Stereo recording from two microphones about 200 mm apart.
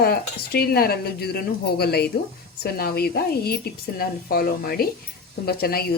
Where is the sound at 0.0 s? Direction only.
50° left (ahead or behind).